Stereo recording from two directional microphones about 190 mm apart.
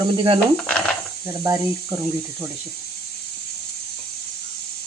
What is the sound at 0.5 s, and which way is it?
Speech, 5° left (ahead or behind).